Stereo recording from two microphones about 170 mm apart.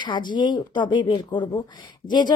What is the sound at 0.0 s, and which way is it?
Speech, 25° left (ahead or behind).